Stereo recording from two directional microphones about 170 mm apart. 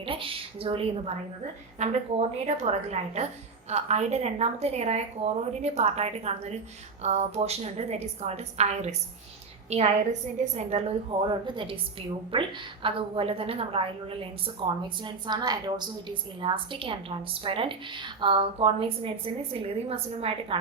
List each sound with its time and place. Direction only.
0.0 s a woman's voice: 30° right (ahead or behind)